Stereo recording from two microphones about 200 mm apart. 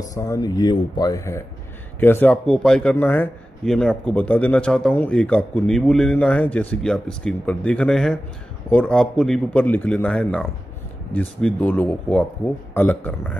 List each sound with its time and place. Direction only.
0.1 s speech: 15° left (ahead or behind)